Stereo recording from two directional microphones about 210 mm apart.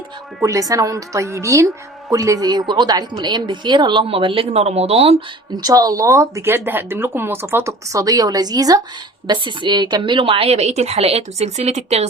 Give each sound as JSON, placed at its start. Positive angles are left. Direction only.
{"t": 0.4, "sound": "a woman's voice", "side_deg": -15}